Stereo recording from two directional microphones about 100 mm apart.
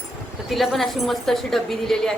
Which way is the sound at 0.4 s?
Centre (ahead or behind).